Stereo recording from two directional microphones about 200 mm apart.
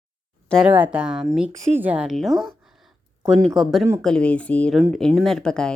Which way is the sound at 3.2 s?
20° right (ahead or behind).